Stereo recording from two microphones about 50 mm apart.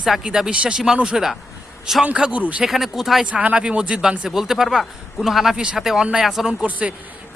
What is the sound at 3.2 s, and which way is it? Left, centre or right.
Speech, right.